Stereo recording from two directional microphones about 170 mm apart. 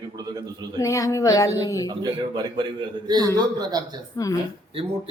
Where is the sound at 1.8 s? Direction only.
25° right (ahead or behind).